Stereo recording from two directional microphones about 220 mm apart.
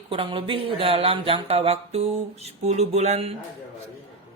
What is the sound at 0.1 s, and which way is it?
Speech, 25° right (ahead or behind).